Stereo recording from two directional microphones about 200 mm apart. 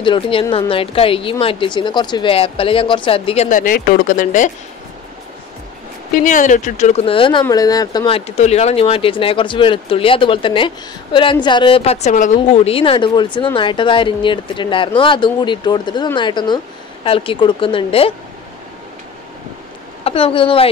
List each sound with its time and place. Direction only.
0.0 s a woman's voice: 25° left (ahead or behind); by 4.5 s 40° left (ahead or behind)
6.1 s a woman's voice: 40° left (ahead or behind); by 8.2 s 20° left (ahead or behind)
8.4 s a woman's voice: 35° left (ahead or behind)
20.0 s a woman's voice: 30° left (ahead or behind)